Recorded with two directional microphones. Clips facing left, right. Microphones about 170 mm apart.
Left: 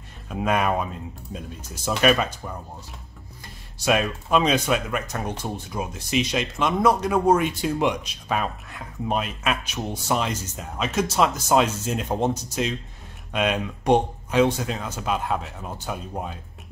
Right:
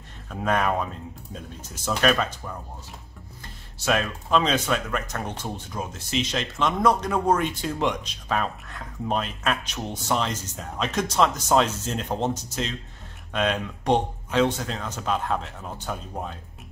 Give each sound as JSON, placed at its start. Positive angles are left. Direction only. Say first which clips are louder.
{"t": 0.3, "sound": "speech", "louder": "left 1 dB", "side_deg": 10}
{"t": 1.9, "sound": "speech", "louder": "left 2 dB", "side_deg": 10}
{"t": 3.8, "sound": "speech", "louder": "left 3 dB", "side_deg": 15}